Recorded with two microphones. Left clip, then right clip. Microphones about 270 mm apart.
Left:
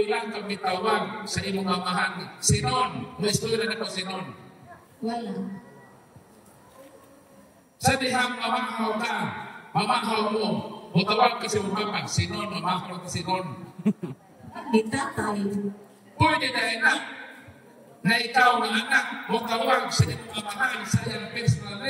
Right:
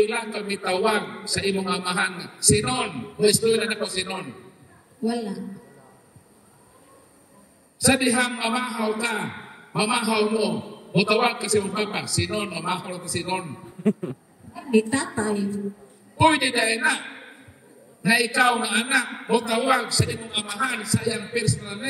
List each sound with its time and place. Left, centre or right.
0.0 s a man's voice: right
7.8 s a man's voice: right
13.8 s a sound: centre
14.7 s a man's voice: right
18.0 s a man's voice: right